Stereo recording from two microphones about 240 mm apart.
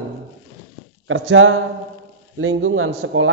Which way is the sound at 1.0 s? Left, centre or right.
Right.